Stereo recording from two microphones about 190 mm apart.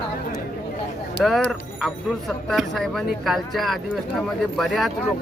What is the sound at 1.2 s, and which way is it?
Speech, centre (ahead or behind).